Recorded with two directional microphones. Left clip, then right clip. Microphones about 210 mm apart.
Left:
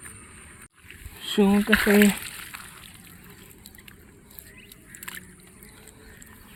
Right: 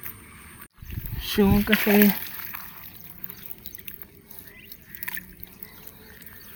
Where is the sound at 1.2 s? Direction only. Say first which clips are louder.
Left 1 dB; 5° right (ahead or behind).